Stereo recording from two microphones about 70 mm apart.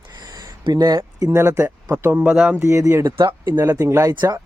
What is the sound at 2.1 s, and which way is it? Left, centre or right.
Speech, centre.